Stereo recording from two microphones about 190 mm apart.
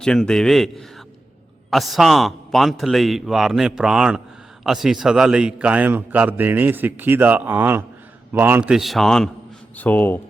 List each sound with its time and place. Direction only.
0.0 s a man's voice: 5° left (ahead or behind)